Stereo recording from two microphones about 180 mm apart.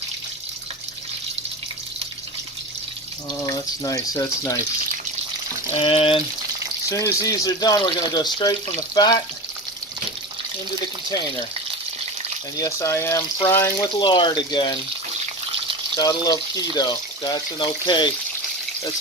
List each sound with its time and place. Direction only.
3.4 s speech: 20° left (ahead or behind)
5.8 s speech: 30° left (ahead or behind)
6.9 s speech: 15° left (ahead or behind)
12.5 s speech: 15° left (ahead or behind)
16.0 s speech: 20° left (ahead or behind)